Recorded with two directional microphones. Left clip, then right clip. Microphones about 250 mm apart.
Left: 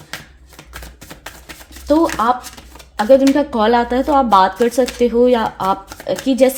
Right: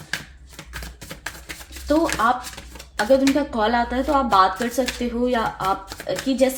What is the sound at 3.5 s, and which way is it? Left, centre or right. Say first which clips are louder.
Speech: left 6 dB; left.